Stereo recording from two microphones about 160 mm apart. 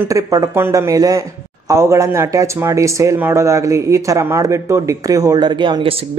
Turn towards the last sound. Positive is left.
turn(degrees=-30)  # may be behind; listen again after turning